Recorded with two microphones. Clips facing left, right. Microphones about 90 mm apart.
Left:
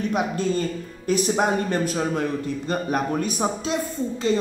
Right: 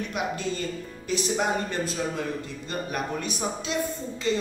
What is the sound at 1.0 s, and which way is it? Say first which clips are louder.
Speech: left 5 dB; 50° left (ahead or behind).